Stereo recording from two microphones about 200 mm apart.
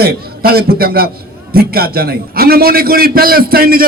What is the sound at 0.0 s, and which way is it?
A man's voice, 50° right (ahead or behind).